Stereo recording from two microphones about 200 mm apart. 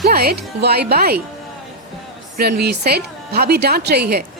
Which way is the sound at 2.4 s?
50° right (ahead or behind).